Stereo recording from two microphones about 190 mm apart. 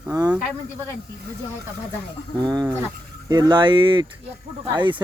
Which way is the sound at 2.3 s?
20° right (ahead or behind).